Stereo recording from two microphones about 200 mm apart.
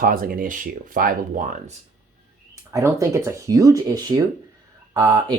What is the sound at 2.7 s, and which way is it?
Speech, 15° right (ahead or behind).